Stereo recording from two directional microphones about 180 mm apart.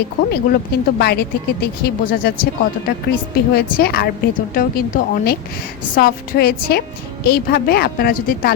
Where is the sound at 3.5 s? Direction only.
55° left (ahead or behind).